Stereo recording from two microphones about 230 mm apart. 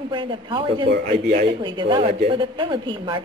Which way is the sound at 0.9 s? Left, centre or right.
Right.